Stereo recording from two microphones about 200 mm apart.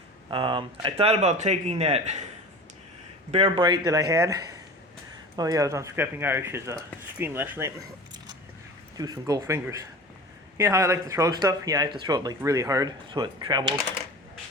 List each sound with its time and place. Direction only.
0.3 s speech: 25° right (ahead or behind)
3.3 s speech: 25° right (ahead or behind); by 7.7 s 10° right (ahead or behind)
9.0 s speech: 20° right (ahead or behind)